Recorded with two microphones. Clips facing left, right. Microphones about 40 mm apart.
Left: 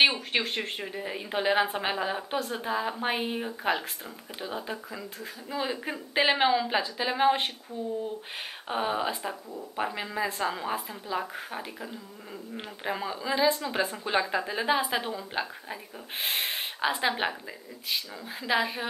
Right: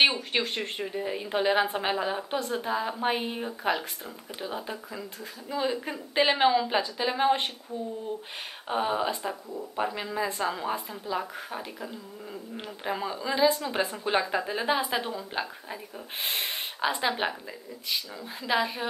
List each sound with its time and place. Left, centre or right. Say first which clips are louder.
0.0 s a woman's voice: even; centre
8.6 s a woman's voice: right 2 dB; centre